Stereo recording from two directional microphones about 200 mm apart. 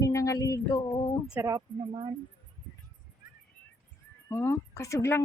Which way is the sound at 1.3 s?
15° right (ahead or behind).